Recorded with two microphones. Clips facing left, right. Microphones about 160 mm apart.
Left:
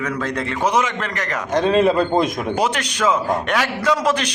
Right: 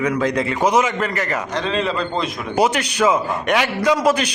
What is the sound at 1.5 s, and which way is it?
Speech, 50° left (ahead or behind).